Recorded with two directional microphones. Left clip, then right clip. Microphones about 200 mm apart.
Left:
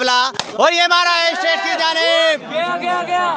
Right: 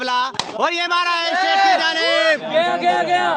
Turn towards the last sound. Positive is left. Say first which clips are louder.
# right 1 dB
turn(degrees=-55)  # may be behind; listen again after turning